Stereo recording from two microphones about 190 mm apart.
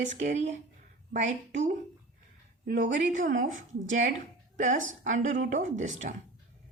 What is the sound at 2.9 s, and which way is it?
Speech, 40° right (ahead or behind).